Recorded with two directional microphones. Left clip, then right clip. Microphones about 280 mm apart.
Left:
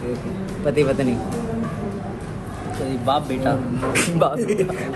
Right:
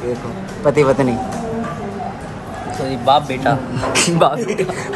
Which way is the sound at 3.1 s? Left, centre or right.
Right.